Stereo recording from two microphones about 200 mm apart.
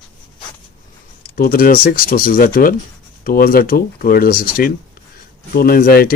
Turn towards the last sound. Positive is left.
turn(degrees=50)  # may be behind; listen again after turning